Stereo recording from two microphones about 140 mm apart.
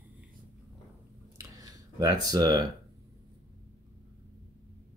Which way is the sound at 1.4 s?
25° right (ahead or behind).